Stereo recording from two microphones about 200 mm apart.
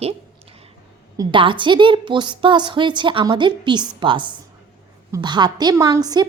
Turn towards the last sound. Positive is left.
turn(degrees=-20)  # may be behind; listen again after turning